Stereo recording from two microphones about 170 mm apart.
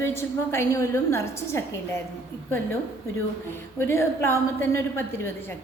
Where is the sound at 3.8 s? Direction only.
15° left (ahead or behind).